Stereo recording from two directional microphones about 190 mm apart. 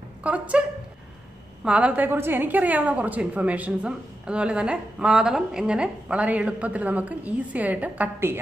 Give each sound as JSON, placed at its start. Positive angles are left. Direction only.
{"t": 0.2, "sound": "a woman's voice", "side_deg": -5}